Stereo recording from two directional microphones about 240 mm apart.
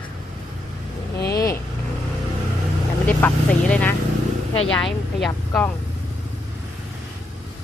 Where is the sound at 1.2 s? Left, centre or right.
Left.